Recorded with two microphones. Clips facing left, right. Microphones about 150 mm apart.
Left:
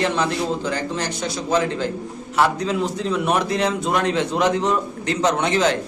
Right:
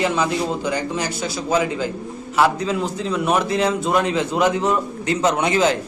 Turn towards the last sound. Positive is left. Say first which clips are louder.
# right 1 dB
turn(degrees=-5)  # may be behind; listen again after turning